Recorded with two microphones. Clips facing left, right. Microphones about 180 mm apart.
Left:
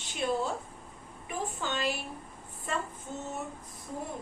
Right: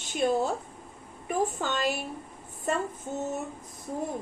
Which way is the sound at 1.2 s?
45° right (ahead or behind).